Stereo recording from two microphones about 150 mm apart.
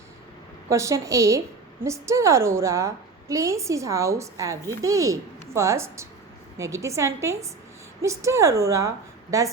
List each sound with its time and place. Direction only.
0.7 s a woman's voice: 20° right (ahead or behind)